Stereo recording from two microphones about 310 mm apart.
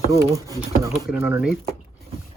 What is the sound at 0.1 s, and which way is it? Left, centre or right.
Speech, centre.